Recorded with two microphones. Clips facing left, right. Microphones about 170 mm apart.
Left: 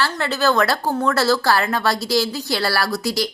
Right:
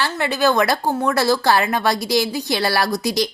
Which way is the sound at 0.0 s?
15° right (ahead or behind).